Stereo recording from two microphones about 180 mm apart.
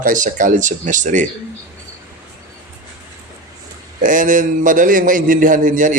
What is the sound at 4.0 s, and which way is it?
A man's voice, 45° right (ahead or behind).